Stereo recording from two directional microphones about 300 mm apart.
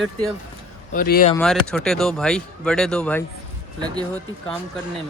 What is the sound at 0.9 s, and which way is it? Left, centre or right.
Speech, left.